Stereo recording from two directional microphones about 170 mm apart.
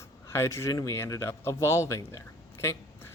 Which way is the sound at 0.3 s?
15° left (ahead or behind).